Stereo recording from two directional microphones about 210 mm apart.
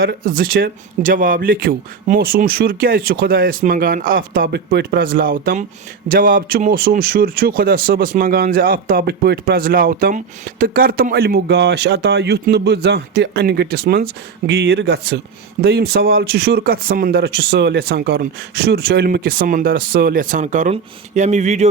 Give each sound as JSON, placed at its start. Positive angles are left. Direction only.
{"t": 0.0, "sound": "speech", "side_deg": -45}